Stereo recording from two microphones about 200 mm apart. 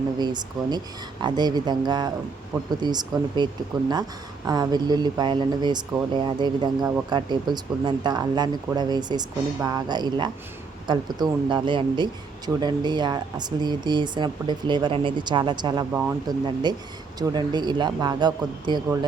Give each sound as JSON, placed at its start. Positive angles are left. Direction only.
{"t": 0.2, "sound": "speech", "side_deg": -20}